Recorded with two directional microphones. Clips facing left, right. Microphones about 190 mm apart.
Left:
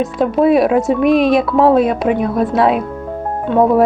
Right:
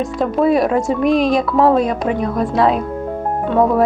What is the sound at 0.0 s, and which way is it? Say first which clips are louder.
A woman's voice: left 3 dB; centre (ahead or behind).